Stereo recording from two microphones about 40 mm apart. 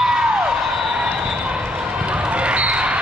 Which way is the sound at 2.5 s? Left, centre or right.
Right.